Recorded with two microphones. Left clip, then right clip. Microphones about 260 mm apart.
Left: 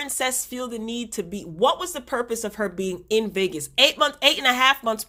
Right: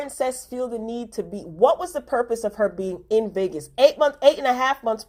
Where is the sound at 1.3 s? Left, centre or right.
Left.